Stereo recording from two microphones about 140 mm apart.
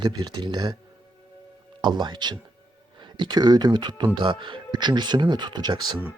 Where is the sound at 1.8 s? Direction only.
30° right (ahead or behind).